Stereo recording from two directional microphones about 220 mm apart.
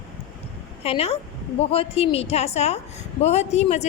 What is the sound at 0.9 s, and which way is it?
A child's voice, 25° left (ahead or behind).